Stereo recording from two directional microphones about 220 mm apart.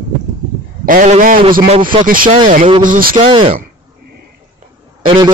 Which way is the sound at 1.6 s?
25° right (ahead or behind).